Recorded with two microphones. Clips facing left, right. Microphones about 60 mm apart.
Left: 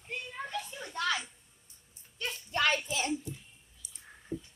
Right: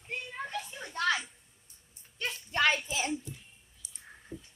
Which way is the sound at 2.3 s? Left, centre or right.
Centre.